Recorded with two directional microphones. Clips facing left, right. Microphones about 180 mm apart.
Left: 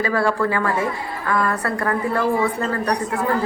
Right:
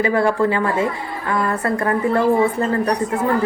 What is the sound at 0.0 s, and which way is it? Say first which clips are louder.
A man's voice: right 3 dB; 20° right (ahead or behind).